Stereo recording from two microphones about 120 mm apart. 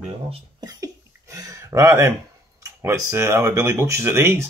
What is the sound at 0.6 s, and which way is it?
Hiccup, 30° right (ahead or behind).